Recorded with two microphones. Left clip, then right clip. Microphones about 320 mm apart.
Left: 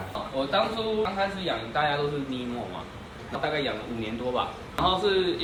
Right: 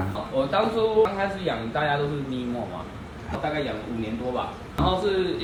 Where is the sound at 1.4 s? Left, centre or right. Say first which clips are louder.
Right 1 dB; centre.